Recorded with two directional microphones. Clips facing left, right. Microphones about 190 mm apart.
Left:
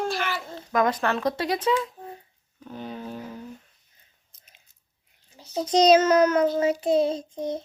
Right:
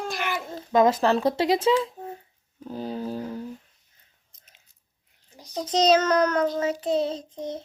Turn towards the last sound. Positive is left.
turn(degrees=10)  # may be behind; listen again after turning